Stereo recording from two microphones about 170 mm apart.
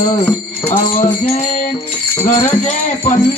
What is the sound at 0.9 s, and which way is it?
Music, 35° left (ahead or behind).